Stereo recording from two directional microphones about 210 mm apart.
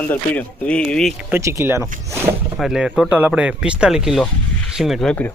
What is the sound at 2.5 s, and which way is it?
Speech, centre (ahead or behind).